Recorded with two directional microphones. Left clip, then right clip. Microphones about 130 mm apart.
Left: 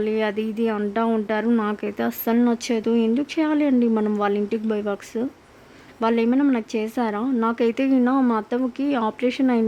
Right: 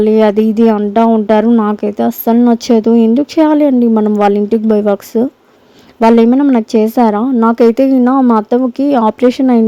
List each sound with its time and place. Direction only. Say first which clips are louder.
0.0 s speech: right 14 dB; 50° right (ahead or behind)
0.8 s speech: right 12 dB; 30° right (ahead or behind); by 6.2 s 50° right (ahead or behind)
6.2 s speech: right 11 dB; 35° right (ahead or behind)